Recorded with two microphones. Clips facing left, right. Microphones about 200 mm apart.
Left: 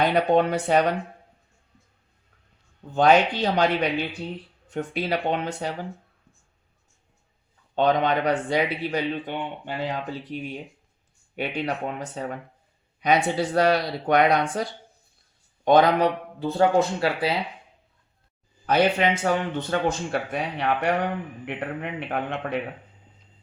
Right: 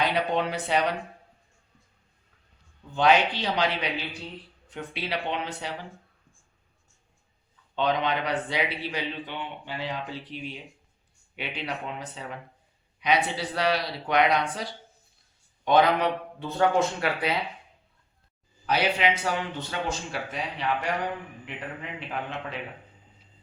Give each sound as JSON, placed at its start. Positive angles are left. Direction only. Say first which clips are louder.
{"t": 0.0, "sound": "a man's voice", "louder": "left 6 dB", "side_deg": 50}
{"t": 2.9, "sound": "a man's voice", "louder": "left 4 dB", "side_deg": 45}
{"t": 7.8, "sound": "a man's voice", "louder": "left 5 dB", "side_deg": 45}
{"t": 15.6, "sound": "a man's voice", "louder": "left 4 dB", "side_deg": 40}
{"t": 18.6, "sound": "a man's voice", "louder": "left 4 dB", "side_deg": 50}